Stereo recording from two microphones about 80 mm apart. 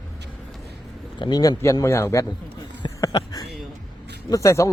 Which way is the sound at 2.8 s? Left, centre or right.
Left.